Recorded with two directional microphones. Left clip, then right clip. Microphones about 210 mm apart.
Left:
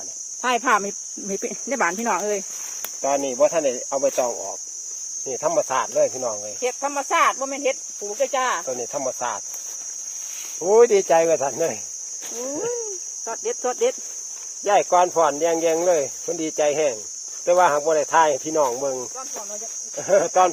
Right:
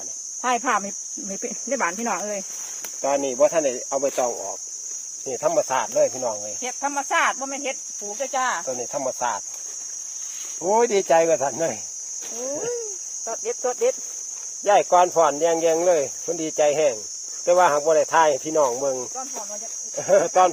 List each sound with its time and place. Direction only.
0.4 s speech: 55° left (ahead or behind)
3.0 s speech: centre (ahead or behind)
6.6 s speech: 20° left (ahead or behind)
8.6 s speech: centre (ahead or behind)
10.6 s speech: centre (ahead or behind)
13.4 s speech: 45° left (ahead or behind)
14.6 s speech: centre (ahead or behind)